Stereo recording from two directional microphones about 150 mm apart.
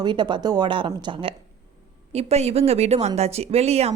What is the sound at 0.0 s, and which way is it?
Speech, 30° right (ahead or behind).